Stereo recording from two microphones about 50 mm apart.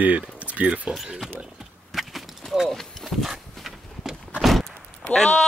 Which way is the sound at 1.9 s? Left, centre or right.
Centre.